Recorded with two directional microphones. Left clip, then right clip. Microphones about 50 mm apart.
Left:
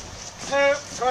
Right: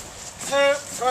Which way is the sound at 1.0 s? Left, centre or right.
Right.